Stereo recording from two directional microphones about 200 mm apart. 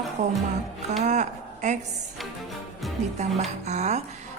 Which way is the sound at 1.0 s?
35° right (ahead or behind).